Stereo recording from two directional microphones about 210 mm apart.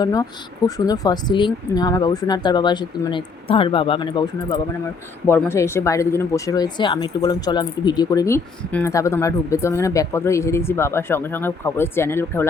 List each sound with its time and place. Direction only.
0.0 s speech: 15° left (ahead or behind)